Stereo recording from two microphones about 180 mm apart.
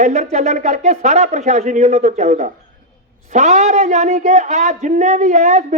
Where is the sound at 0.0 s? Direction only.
40° right (ahead or behind).